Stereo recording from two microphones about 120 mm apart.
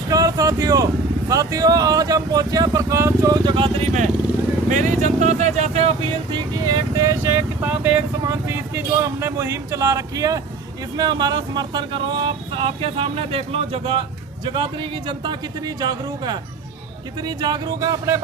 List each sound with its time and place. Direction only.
0.1 s vehicle: 30° right (ahead or behind)
1.3 s speech: 30° right (ahead or behind); by 3.8 s 45° right (ahead or behind)
4.7 s speech: 90° right; by 6.1 s 55° right (ahead or behind)
6.3 s speech: 35° right (ahead or behind); by 14.0 s 55° right (ahead or behind)
14.4 s speech: 40° right (ahead or behind)